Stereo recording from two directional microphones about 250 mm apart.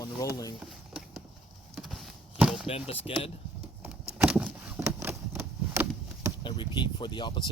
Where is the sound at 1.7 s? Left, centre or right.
Centre.